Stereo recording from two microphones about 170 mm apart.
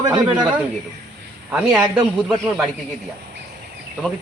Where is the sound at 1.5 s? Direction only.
5° right (ahead or behind).